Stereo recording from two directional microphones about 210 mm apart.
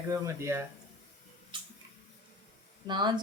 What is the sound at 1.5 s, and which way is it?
Tick-tock, 25° right (ahead or behind).